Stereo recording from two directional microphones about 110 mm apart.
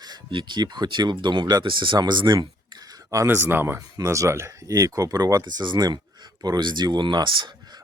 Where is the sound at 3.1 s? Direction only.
25° right (ahead or behind).